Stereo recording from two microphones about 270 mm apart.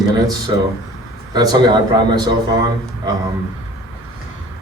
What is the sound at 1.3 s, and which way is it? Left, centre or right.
Speech, centre.